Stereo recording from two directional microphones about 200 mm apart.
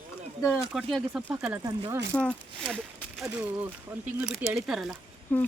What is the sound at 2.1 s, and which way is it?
Speech, 5° left (ahead or behind).